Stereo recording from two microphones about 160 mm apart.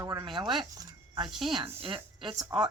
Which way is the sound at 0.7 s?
25° right (ahead or behind).